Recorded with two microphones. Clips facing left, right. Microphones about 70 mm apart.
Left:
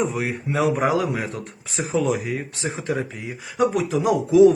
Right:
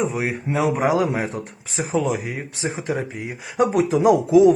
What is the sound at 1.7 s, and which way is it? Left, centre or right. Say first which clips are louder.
Speech: even; centre.